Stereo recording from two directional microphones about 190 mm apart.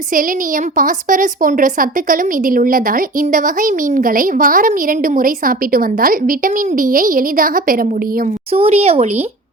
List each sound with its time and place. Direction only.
0.8 s a woman's voice: 45° right (ahead or behind)
8.5 s speech: 30° right (ahead or behind)